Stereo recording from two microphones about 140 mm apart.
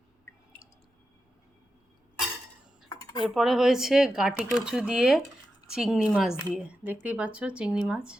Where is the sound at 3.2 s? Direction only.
Centre (ahead or behind).